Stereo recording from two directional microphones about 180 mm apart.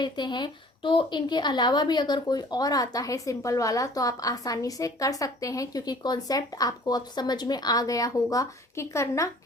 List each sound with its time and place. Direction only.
0.0 s a woman's voice: 25° left (ahead or behind)